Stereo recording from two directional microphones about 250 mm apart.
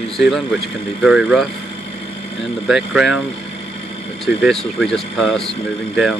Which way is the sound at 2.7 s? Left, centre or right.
Centre.